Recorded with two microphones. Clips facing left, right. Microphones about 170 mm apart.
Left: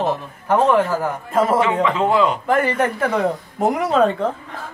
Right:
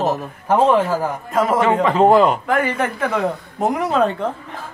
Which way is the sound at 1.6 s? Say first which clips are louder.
Right 3 dB; 45° right (ahead or behind).